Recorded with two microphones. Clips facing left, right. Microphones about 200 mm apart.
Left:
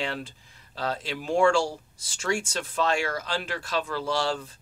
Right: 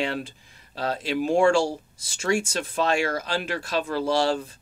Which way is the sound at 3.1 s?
25° right (ahead or behind).